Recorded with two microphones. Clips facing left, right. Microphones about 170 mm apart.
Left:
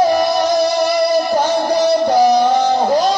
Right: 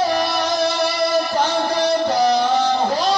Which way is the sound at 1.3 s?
45° left (ahead or behind).